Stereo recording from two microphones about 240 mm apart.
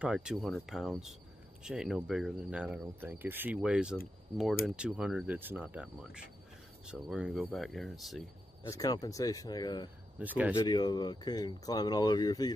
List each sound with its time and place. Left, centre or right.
0.0 s speech: centre
8.6 s speech: centre
10.1 s speech: centre
10.5 s speech: centre